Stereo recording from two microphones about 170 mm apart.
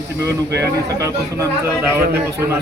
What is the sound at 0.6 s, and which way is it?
Speech, 15° right (ahead or behind).